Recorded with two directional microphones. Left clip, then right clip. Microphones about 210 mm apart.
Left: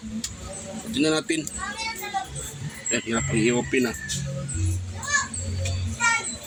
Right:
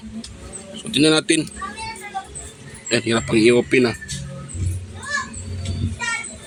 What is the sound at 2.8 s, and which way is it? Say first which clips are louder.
Speech: right 7 dB; 50° right (ahead or behind).